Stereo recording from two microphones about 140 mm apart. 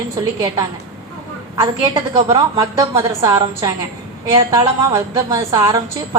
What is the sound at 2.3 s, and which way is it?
A woman's voice, 25° right (ahead or behind).